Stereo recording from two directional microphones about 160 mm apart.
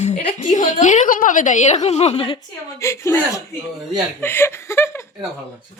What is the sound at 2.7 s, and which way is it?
A woman's voice, 20° left (ahead or behind).